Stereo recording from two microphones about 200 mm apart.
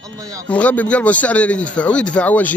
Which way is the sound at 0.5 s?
5° left (ahead or behind).